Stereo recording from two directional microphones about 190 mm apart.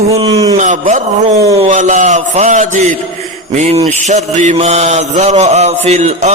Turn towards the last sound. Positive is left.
turn(degrees=-35)  # may be behind; listen again after turning